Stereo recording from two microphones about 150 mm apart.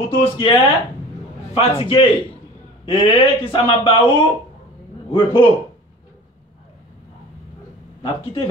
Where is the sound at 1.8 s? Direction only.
35° left (ahead or behind).